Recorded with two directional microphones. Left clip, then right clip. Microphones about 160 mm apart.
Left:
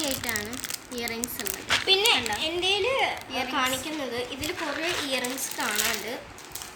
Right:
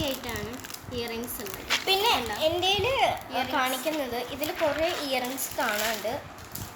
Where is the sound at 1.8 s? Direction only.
35° right (ahead or behind); by 3.1 s 55° right (ahead or behind).